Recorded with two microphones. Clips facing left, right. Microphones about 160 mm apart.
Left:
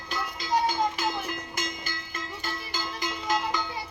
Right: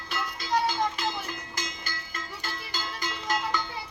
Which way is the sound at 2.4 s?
15° left (ahead or behind).